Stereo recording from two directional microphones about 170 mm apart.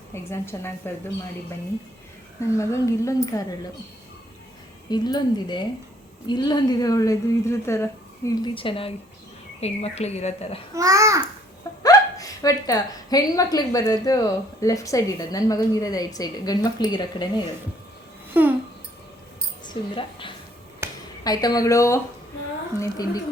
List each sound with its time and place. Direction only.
0.1 s a woman's voice: 15° left (ahead or behind)
2.6 s a woman's voice: 15° left (ahead or behind)
4.9 s a woman's voice: 25° left (ahead or behind); by 10.6 s 40° left (ahead or behind)
10.8 s a child's voice: 20° right (ahead or behind)
11.8 s a woman's voice: 20° left (ahead or behind)
18.3 s babbling: 10° right (ahead or behind)
19.6 s a woman's voice: 30° left (ahead or behind)
20.8 s a sound: 15° right (ahead or behind)
21.2 s a woman's voice: 20° left (ahead or behind)